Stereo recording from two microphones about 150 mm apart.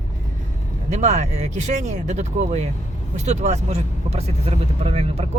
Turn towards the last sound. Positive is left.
turn(degrees=-40)  # may be behind; listen again after turning